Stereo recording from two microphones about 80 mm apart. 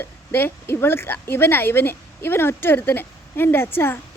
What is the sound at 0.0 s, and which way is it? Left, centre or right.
A woman's voice, left.